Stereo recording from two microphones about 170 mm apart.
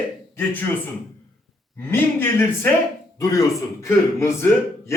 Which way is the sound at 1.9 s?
10° left (ahead or behind).